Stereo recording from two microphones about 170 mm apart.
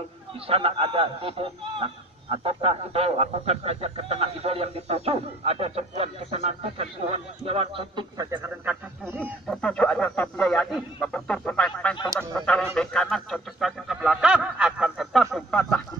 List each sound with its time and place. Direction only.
0.5 s speech: 35° right (ahead or behind)
8.3 s speech: 10° right (ahead or behind)
9.5 s speech: 5° left (ahead or behind)